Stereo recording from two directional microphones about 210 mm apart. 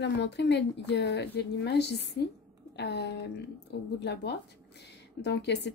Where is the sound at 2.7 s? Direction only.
55° left (ahead or behind).